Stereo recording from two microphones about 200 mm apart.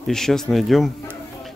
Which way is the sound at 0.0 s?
Centre (ahead or behind).